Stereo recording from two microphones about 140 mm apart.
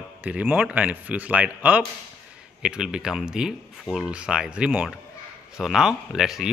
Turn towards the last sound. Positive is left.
turn(degrees=-5)  # may be behind; listen again after turning